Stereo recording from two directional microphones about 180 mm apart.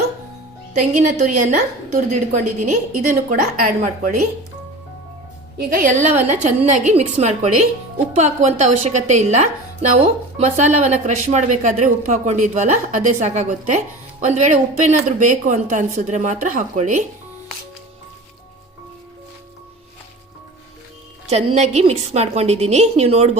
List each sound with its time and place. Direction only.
0.7 s a woman's voice: 40° right (ahead or behind)
5.5 s a woman's voice: 50° right (ahead or behind)
21.2 s speech: 40° right (ahead or behind)